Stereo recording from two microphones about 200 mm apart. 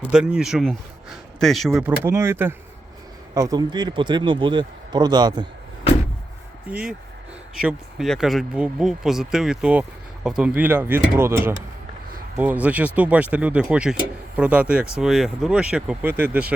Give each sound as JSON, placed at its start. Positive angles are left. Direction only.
{"t": 0.1, "sound": "speech", "side_deg": -5}
{"t": 2.0, "sound": "a man's voice", "side_deg": -15}
{"t": 6.7, "sound": "speech", "side_deg": -5}